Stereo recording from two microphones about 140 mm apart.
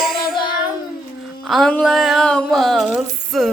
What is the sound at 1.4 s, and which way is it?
A child's voice, centre (ahead or behind).